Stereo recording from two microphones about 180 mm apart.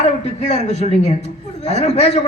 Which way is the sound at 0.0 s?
40° left (ahead or behind).